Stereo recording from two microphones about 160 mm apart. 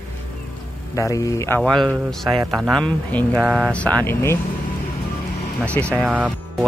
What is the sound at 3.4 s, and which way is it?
Speech, 5° right (ahead or behind).